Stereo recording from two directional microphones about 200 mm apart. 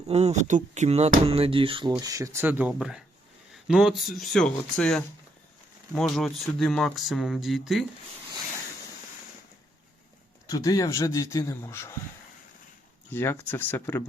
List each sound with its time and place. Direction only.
0.1 s speech: 35° right (ahead or behind); by 7.9 s centre (ahead or behind)
10.5 s speech: 15° left (ahead or behind)
13.1 s speech: 10° left (ahead or behind)